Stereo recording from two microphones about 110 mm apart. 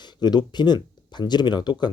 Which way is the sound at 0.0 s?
40° left (ahead or behind).